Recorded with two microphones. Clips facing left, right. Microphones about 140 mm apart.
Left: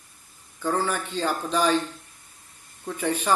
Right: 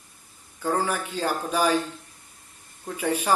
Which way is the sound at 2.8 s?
10° right (ahead or behind).